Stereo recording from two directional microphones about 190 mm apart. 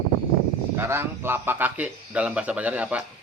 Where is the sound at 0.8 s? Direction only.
15° right (ahead or behind).